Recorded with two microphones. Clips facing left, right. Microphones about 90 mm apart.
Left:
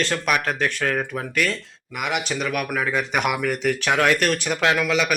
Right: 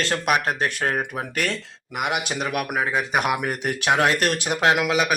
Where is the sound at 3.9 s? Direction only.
35° right (ahead or behind).